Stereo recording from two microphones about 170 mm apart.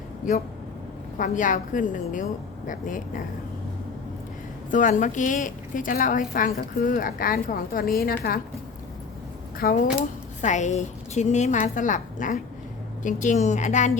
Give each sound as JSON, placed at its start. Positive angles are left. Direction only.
{"t": 1.2, "sound": "a woman's voice", "side_deg": 50}
{"t": 4.7, "sound": "a woman's voice", "side_deg": 50}
{"t": 9.6, "sound": "a woman's voice", "side_deg": 60}
{"t": 10.4, "sound": "a woman's voice", "side_deg": 45}